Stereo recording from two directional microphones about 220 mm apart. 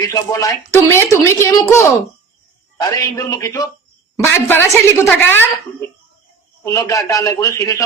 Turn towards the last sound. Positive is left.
turn(degrees=15)  # may be behind; listen again after turning